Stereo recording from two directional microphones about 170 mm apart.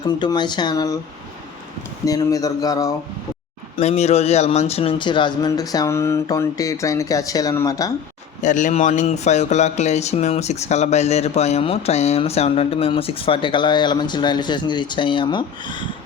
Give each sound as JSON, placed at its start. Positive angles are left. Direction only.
{"t": 0.0, "sound": "speech", "side_deg": 25}
{"t": 2.0, "sound": "speech", "side_deg": 20}
{"t": 3.8, "sound": "speech", "side_deg": 40}
{"t": 8.4, "sound": "speech", "side_deg": 45}